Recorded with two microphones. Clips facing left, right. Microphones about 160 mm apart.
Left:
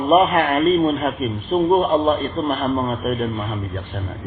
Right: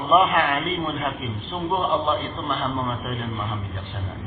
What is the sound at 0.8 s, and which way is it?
A man's voice, 50° left (ahead or behind).